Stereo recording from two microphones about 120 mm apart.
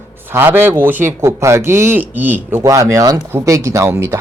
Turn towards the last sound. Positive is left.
turn(degrees=-25)  # may be behind; listen again after turning